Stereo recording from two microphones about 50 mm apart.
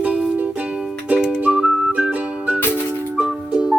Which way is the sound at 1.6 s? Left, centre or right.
Centre.